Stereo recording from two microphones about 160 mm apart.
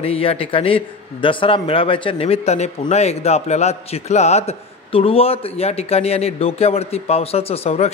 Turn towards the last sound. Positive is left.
turn(degrees=40)  # may be behind; listen again after turning